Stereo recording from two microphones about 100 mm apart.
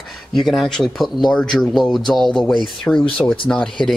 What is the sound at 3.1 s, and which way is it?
Speech, 15° left (ahead or behind).